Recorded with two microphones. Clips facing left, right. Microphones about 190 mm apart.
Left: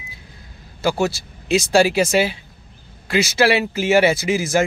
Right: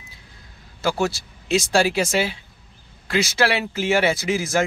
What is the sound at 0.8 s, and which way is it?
Speech, centre (ahead or behind).